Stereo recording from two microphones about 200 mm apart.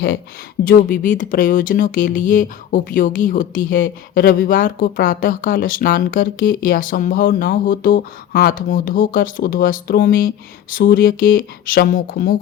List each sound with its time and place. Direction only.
0.7 s speech: 45° left (ahead or behind)